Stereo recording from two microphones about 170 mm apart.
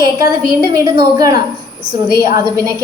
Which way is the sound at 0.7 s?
20° right (ahead or behind).